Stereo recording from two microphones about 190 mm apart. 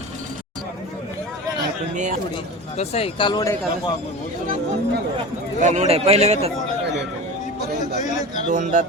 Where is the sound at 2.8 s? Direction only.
30° left (ahead or behind).